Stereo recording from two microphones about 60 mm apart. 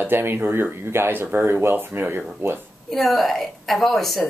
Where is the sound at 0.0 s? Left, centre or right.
Right.